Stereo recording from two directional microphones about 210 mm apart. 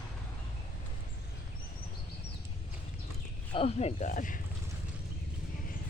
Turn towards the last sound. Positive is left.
turn(degrees=40)  # may be behind; listen again after turning